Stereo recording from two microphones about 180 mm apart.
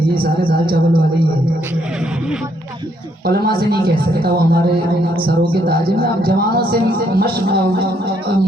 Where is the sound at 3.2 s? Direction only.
60° right (ahead or behind).